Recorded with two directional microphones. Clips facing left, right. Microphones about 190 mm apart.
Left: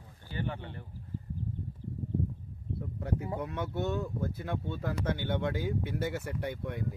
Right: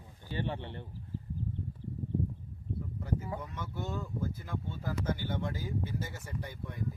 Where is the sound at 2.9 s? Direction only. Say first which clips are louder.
Left 3 dB; 65° left (ahead or behind).